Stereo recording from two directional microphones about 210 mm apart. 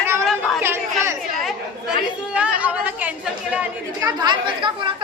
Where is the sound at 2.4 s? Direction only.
5° right (ahead or behind).